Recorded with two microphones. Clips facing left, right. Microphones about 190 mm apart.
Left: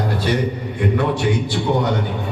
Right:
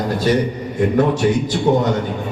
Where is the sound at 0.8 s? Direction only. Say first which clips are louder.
Right 4 dB; 45° right (ahead or behind).